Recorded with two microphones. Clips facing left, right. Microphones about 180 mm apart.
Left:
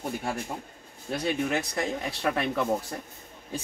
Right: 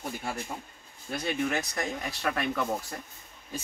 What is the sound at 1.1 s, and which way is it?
Speech, 30° left (ahead or behind).